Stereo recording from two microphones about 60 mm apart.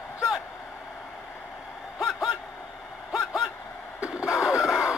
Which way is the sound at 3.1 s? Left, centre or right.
Centre.